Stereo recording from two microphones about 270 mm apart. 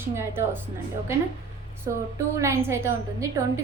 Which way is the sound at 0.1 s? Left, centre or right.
Centre.